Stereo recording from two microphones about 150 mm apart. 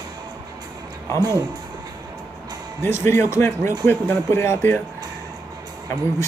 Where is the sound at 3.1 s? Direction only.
15° left (ahead or behind).